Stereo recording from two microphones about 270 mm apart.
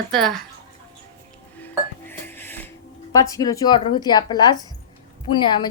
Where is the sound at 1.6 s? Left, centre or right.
Centre.